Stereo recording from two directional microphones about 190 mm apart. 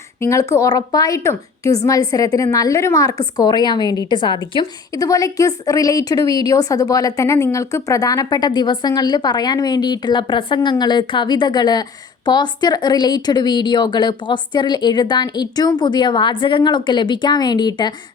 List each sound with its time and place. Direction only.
0.2 s a woman's voice: 15° left (ahead or behind)